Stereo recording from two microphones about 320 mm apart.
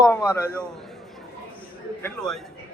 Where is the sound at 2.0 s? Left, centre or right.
Centre.